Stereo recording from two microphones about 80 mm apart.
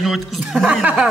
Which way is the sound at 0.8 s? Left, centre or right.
Centre.